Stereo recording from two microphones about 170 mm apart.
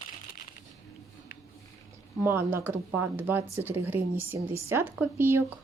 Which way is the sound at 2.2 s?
15° right (ahead or behind).